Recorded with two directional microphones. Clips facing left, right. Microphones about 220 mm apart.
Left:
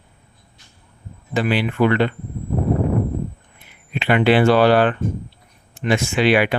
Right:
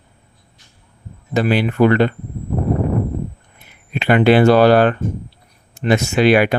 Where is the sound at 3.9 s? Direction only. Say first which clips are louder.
Right 3 dB; 45° right (ahead or behind).